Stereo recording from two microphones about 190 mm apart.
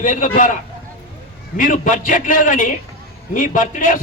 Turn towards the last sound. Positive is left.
turn(degrees=45)  # may be behind; listen again after turning